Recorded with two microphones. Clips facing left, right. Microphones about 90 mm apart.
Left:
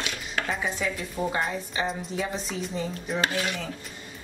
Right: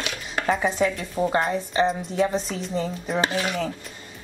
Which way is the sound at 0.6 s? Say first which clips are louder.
Right 6 dB; 40° right (ahead or behind).